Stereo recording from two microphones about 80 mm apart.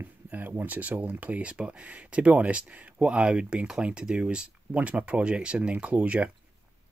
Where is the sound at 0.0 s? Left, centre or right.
Right.